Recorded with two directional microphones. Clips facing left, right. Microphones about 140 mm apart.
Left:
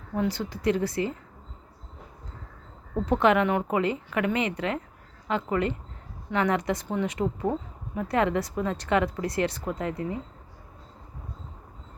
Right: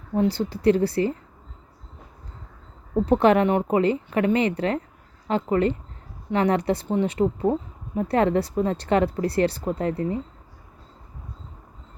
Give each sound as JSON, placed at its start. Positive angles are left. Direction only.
{"t": 0.2, "sound": "speech", "side_deg": -30}
{"t": 2.9, "sound": "speech", "side_deg": -35}